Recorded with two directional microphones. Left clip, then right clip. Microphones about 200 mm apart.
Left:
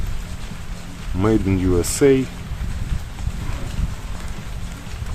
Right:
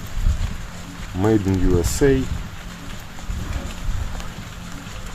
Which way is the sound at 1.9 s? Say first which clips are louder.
Left 4 dB; 10° left (ahead or behind).